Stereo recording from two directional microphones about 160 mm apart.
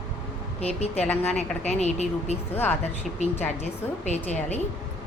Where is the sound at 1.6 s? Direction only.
45° left (ahead or behind).